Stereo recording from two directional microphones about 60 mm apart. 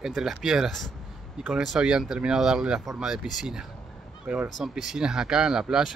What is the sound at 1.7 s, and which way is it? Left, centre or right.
Speech, centre.